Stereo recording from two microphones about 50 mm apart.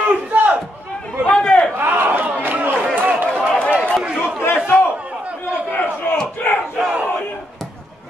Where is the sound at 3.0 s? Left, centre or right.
Right.